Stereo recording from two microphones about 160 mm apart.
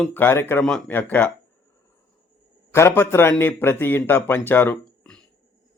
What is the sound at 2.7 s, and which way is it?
Speech, 15° left (ahead or behind).